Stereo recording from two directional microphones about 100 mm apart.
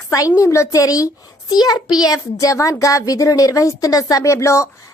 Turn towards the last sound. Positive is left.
turn(degrees=30)  # may be behind; listen again after turning